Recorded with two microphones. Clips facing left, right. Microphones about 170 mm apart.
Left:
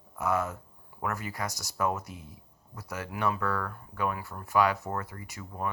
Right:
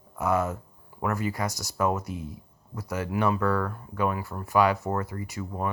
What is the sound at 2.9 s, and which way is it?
Speech, 15° right (ahead or behind).